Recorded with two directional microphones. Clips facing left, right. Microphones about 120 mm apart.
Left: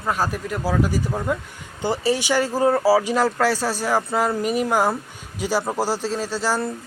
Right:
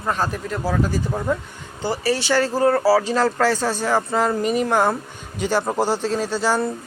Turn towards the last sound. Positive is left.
turn(degrees=0)  # may be behind; listen again after turning